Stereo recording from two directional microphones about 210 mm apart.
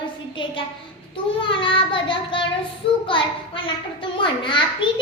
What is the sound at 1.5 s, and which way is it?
Child singing, 25° left (ahead or behind).